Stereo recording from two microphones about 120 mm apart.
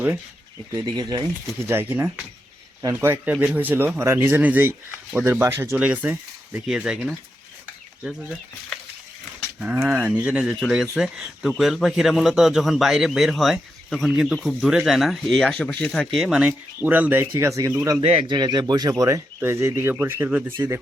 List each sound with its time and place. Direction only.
0.7 s speech: 35° right (ahead or behind)
1.6 s a man's voice: 20° right (ahead or behind); by 8.8 s centre (ahead or behind)
9.4 s a man's voice: 10° right (ahead or behind); by 16.2 s 5° left (ahead or behind)
16.2 s speech: 10° right (ahead or behind); by 18.0 s 25° right (ahead or behind)
18.0 s a man's voice: 55° right (ahead or behind)
18.3 s speech: 35° right (ahead or behind); by 20.7 s 20° right (ahead or behind)